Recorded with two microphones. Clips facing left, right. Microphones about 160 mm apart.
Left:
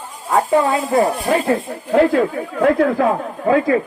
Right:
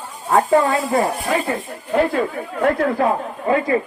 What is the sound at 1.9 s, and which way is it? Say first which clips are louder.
Speech: left 4 dB; 90° left.